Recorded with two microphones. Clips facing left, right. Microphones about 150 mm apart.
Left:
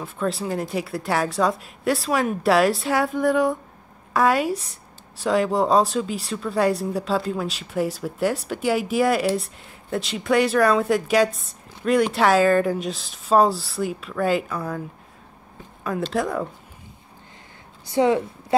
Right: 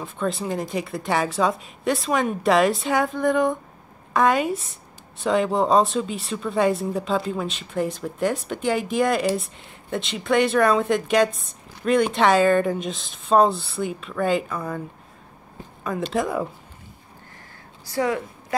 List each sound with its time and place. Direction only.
0.0 s speech: centre (ahead or behind)
15.8 s speech: centre (ahead or behind)
17.8 s a woman's voice: 25° left (ahead or behind)